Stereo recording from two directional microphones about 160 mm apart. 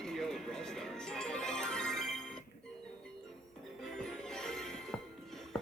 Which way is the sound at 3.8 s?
5° left (ahead or behind).